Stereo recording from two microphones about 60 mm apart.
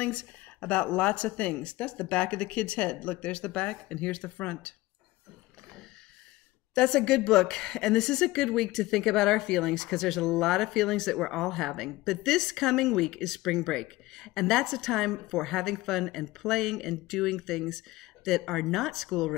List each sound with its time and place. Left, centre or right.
0.0 s speech: left
6.7 s a woman's voice: centre